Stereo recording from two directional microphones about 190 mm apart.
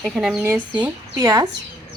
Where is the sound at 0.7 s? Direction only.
20° right (ahead or behind).